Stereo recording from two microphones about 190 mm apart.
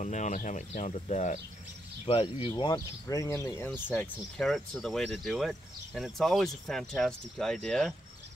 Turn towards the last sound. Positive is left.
turn(degrees=0)  # may be behind; listen again after turning